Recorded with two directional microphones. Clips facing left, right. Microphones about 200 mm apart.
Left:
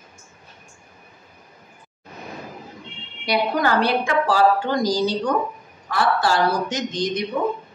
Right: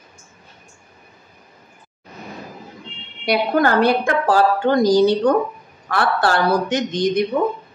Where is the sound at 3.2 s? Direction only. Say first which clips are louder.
Right 4 dB; 55° right (ahead or behind).